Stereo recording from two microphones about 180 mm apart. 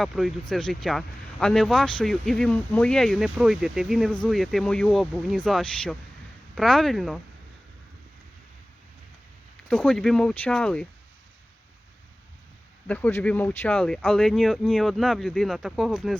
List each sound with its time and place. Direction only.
0.0 s speech: centre (ahead or behind)
9.6 s speech: 5° left (ahead or behind)
12.9 s speech: 10° left (ahead or behind)